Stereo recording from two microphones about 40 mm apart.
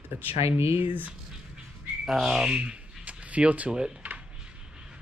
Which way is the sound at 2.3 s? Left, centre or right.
Right.